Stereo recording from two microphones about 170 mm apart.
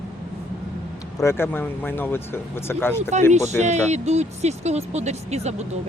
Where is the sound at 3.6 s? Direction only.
40° right (ahead or behind).